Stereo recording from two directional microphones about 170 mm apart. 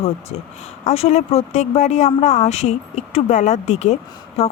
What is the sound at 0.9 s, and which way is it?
Speech, 40° left (ahead or behind).